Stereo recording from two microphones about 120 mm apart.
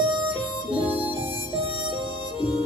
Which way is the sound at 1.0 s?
15° right (ahead or behind).